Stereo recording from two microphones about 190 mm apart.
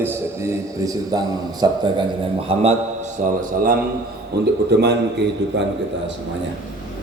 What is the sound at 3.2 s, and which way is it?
Speech, 45° right (ahead or behind).